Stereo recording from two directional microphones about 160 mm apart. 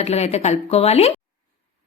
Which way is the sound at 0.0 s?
40° left (ahead or behind).